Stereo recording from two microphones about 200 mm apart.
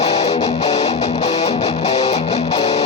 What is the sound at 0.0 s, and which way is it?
Music, 35° left (ahead or behind).